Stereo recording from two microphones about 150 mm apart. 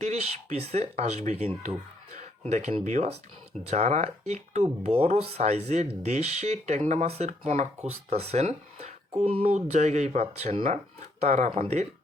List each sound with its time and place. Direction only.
0.0 s speech: 45° right (ahead or behind)